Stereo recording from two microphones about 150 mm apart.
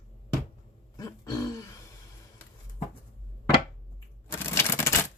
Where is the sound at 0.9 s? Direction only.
20° left (ahead or behind).